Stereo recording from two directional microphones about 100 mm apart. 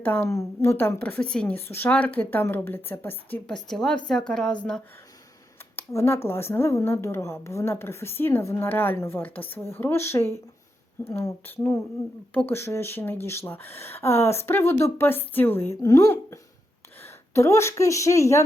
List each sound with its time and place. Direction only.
0.2 s speech: 30° left (ahead or behind)
3.5 s a woman's voice: 5° left (ahead or behind)
5.9 s a woman's voice: 30° left (ahead or behind); by 12.5 s 15° left (ahead or behind)
12.5 s a woman's voice: 25° left (ahead or behind)